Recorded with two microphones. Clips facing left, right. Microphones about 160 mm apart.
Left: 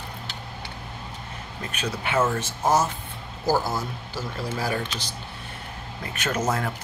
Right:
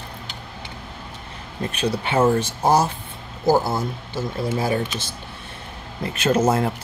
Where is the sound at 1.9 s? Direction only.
30° right (ahead or behind).